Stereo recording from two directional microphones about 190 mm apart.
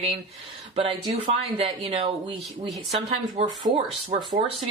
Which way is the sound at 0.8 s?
30° right (ahead or behind).